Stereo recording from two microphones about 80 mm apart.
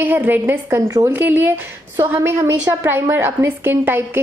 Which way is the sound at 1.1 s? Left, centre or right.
Right.